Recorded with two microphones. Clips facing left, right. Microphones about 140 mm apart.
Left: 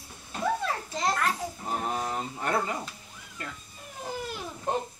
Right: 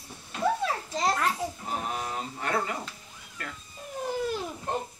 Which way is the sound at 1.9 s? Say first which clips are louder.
Left 2 dB; 25° left (ahead or behind).